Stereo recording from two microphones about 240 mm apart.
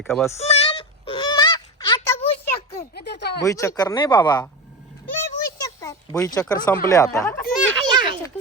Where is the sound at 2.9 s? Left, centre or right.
Left.